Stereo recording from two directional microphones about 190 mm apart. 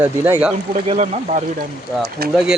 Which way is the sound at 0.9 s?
35° right (ahead or behind).